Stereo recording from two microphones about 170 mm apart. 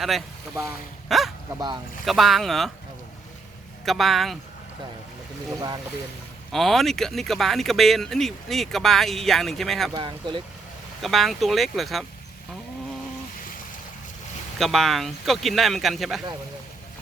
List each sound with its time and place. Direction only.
0.0 s speech: centre (ahead or behind)
1.5 s speech: 25° right (ahead or behind)
2.0 s speech: centre (ahead or behind)
3.8 s speech: centre (ahead or behind)
6.5 s speech: centre (ahead or behind)
9.9 s speech: 25° right (ahead or behind)
11.0 s speech: centre (ahead or behind)
14.6 s speech: centre (ahead or behind)